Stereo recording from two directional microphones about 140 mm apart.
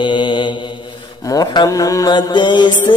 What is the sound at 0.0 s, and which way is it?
Mantra, 35° left (ahead or behind).